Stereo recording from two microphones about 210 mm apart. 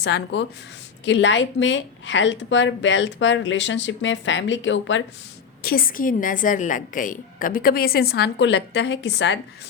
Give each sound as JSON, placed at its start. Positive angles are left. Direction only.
{"t": 0.0, "sound": "speech", "side_deg": 55}
{"t": 5.6, "sound": "a woman's voice", "side_deg": 45}